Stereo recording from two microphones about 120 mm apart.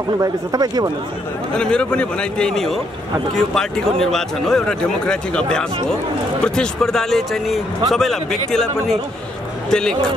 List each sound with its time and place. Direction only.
0.2 s speech: 35° right (ahead or behind)
1.6 s a man's voice: 10° left (ahead or behind)
6.4 s a man's voice: 5° left (ahead or behind)